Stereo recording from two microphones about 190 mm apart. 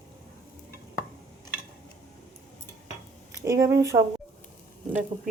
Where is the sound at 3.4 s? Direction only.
15° right (ahead or behind).